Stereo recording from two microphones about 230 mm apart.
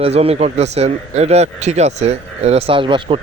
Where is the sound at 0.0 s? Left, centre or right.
Right.